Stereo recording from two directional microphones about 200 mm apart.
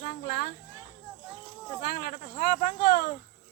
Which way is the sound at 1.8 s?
50° left (ahead or behind).